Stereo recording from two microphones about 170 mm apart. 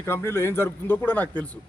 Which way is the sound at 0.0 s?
15° left (ahead or behind).